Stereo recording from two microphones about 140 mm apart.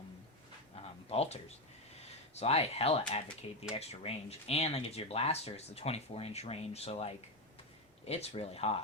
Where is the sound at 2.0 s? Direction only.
50° left (ahead or behind).